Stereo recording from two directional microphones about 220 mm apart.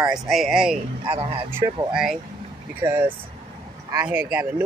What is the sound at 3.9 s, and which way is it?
Speech, 5° right (ahead or behind).